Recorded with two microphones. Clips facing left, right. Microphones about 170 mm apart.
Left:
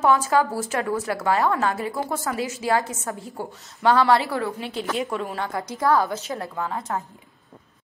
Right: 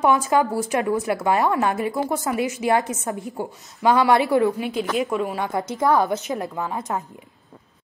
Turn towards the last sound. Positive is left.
turn(degrees=-15)  # may be behind; listen again after turning